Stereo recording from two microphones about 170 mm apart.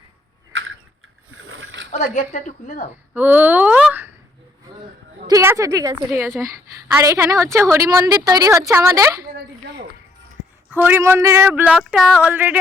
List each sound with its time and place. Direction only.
2.1 s a woman's voice: 45° left (ahead or behind)
3.2 s a sound: 10° right (ahead or behind)
5.3 s a woman's voice: 15° right (ahead or behind)
10.7 s speech: 10° right (ahead or behind)
12.3 s speech: 10° right (ahead or behind)